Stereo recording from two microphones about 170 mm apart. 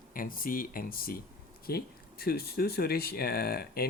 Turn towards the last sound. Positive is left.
turn(degrees=65)  # may be behind; listen again after turning